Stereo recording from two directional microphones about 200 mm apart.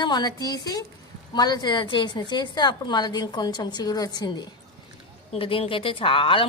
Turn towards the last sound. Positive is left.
turn(degrees=25)  # may be behind; listen again after turning